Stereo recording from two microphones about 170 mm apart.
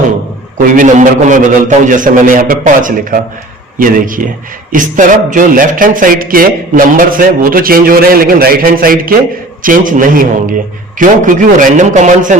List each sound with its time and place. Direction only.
0.8 s a man's voice: 50° right (ahead or behind)